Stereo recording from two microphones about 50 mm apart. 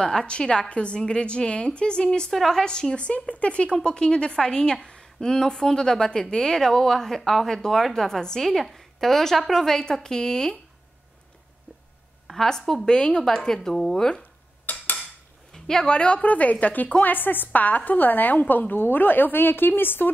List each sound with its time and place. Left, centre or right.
0.0 s a woman's voice: centre
12.3 s a woman's voice: centre
15.5 s a woman's voice: centre; by 20.1 s left